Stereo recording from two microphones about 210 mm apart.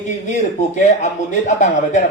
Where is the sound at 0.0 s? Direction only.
35° left (ahead or behind).